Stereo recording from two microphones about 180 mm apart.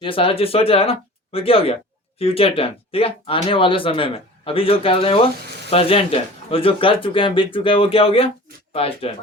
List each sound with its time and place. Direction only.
0.0 s speech: 30° left (ahead or behind)